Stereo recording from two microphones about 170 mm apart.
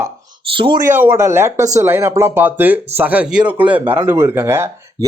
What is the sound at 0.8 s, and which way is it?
Speech, 15° right (ahead or behind).